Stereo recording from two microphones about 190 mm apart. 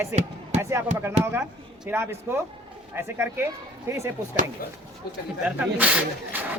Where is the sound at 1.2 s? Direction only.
35° right (ahead or behind).